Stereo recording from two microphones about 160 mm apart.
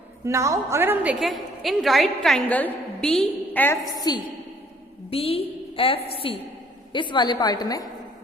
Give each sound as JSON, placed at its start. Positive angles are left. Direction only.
{"t": 0.3, "sound": "a woman's voice", "side_deg": -20}
{"t": 1.2, "sound": "a woman's voice", "side_deg": 0}
{"t": 3.9, "sound": "a woman's voice", "side_deg": 25}
{"t": 5.1, "sound": "a woman's voice", "side_deg": 35}